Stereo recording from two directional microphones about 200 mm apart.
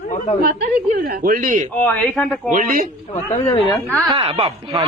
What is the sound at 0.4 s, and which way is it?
A man's voice, 45° right (ahead or behind).